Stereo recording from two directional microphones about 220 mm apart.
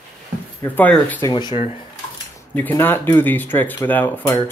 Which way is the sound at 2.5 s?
10° left (ahead or behind).